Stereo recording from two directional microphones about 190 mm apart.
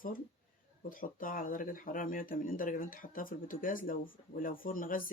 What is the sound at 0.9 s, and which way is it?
Speech, 45° left (ahead or behind).